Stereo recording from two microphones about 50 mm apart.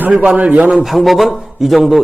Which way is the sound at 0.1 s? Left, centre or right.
Right.